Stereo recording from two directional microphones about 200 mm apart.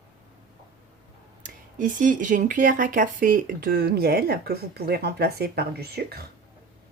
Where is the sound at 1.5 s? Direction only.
40° right (ahead or behind).